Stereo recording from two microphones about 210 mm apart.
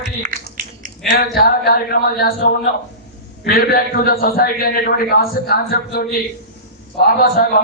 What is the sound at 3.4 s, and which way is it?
A man's voice, 45° left (ahead or behind).